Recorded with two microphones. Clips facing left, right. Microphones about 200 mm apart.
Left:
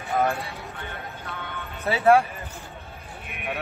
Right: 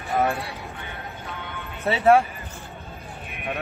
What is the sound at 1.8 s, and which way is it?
Speech, centre (ahead or behind).